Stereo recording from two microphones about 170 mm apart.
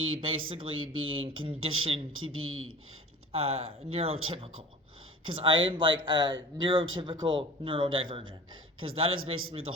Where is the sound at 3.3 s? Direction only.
35° right (ahead or behind).